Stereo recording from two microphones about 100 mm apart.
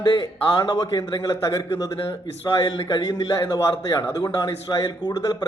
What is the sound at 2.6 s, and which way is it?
Speech, 45° left (ahead or behind).